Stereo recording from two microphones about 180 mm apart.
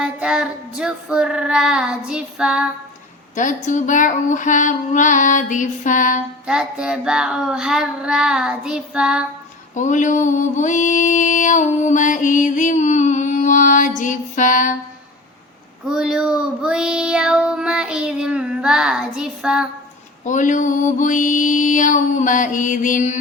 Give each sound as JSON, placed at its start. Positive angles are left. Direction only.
{"t": 0.0, "sound": "a sound", "side_deg": -5}
{"t": 0.8, "sound": "child singing", "side_deg": -5}
{"t": 3.3, "sound": "mantra", "side_deg": 45}
{"t": 6.4, "sound": "child singing", "side_deg": -5}
{"t": 9.7, "sound": "mantra", "side_deg": 45}
{"t": 15.9, "sound": "child singing", "side_deg": -5}
{"t": 20.2, "sound": "mantra", "side_deg": 45}